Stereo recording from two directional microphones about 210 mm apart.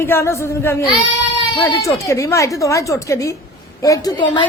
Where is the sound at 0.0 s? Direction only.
10° left (ahead or behind).